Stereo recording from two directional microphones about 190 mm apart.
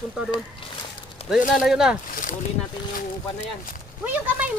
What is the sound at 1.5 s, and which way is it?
Speech, 5° right (ahead or behind).